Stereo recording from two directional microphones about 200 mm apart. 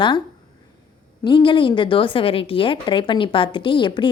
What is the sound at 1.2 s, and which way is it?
A woman's voice, 25° left (ahead or behind).